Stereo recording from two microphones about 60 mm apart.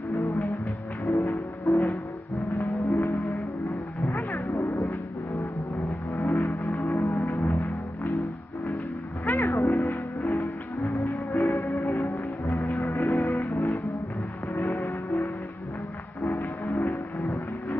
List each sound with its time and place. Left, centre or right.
0.1 s music: left
4.1 s music: left
6.1 s music: left
9.2 s music: left
9.5 s music: left
10.8 s music: left
14.8 s music: left